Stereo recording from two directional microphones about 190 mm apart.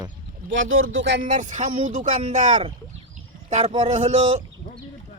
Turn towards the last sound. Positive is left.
turn(degrees=-40)  # may be behind; listen again after turning